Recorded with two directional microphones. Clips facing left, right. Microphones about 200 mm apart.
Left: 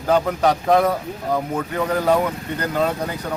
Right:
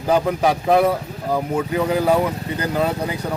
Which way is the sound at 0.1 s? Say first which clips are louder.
Even; 10° right (ahead or behind).